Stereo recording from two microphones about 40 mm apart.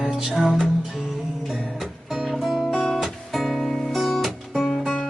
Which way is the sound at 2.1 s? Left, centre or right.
Centre.